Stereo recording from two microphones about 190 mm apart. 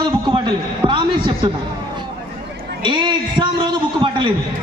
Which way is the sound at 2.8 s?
25° right (ahead or behind).